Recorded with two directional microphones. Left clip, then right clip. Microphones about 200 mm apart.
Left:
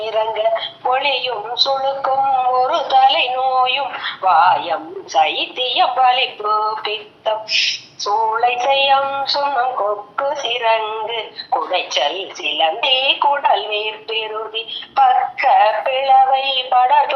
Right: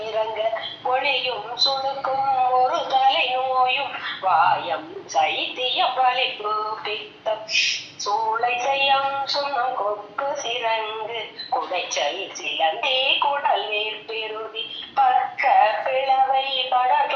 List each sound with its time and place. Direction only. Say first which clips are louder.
0.0 s a sound: left 6 dB; 25° left (ahead or behind)
2.6 s speech: left 6 dB; 20° left (ahead or behind)
8.0 s synthetic singing: left 6 dB; 25° left (ahead or behind)